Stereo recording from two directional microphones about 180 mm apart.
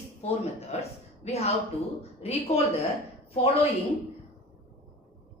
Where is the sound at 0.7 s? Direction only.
35° left (ahead or behind).